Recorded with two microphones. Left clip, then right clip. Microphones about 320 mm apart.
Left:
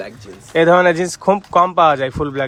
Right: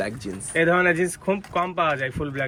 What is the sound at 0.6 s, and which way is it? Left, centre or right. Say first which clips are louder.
Speech: left 8 dB; centre.